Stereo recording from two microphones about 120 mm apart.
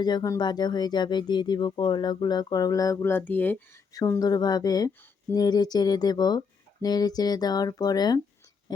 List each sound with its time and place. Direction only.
0.0 s speech: 35° left (ahead or behind); by 3.6 s 15° left (ahead or behind)
3.9 s speech: 30° left (ahead or behind)